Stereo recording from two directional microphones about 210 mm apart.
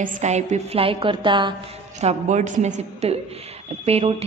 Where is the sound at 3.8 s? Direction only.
30° right (ahead or behind).